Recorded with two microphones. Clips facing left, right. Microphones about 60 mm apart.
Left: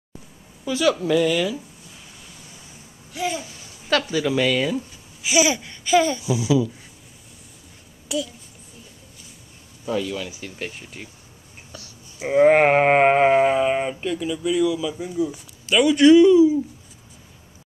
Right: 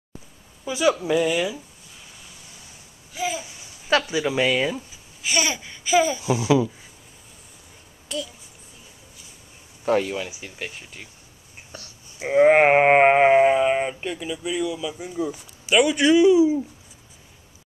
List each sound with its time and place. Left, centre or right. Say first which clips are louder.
0.7 s a sound: left 1 dB; centre
3.1 s babbling: left 1 dB; centre
3.4 s speech: right 1 dB; centre
4.7 s speech: left 7 dB; centre
6.2 s speech: right 1 dB; right
8.1 s a child's voice: left 4 dB; centre
9.8 s speech: right 4 dB; right
10.4 s speech: left 2 dB; centre
11.7 s a sound: even; right
12.3 s a sound: even; centre